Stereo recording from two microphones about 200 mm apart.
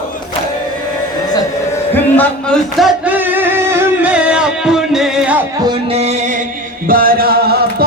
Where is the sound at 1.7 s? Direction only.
10° left (ahead or behind).